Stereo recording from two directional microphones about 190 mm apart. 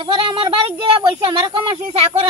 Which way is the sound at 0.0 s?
30° right (ahead or behind).